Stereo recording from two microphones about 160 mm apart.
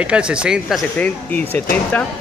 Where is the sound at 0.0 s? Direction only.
5° right (ahead or behind).